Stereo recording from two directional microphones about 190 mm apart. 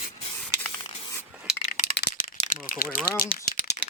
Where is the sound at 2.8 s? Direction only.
10° left (ahead or behind).